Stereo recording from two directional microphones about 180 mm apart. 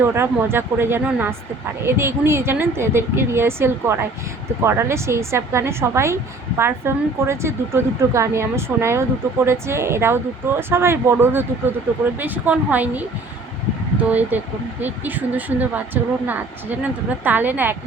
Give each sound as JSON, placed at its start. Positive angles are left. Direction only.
{"t": 0.0, "sound": "a woman's voice", "side_deg": -15}
{"t": 14.1, "sound": "a woman's voice", "side_deg": -10}